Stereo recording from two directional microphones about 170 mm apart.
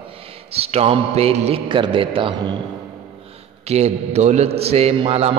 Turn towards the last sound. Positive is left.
turn(degrees=-35)  # may be behind; listen again after turning